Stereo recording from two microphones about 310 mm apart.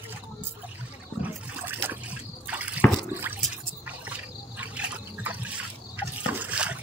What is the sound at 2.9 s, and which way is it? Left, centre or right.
Water, centre.